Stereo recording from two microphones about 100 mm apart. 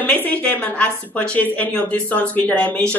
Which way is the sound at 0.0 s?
15° left (ahead or behind).